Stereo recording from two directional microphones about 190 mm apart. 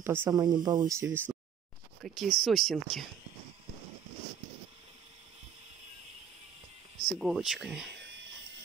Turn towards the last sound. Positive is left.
turn(degrees=0)  # may be behind; listen again after turning